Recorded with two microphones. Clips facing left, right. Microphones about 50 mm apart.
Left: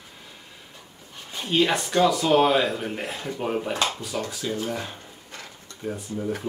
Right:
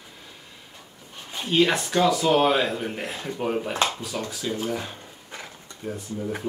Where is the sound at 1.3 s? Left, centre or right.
Centre.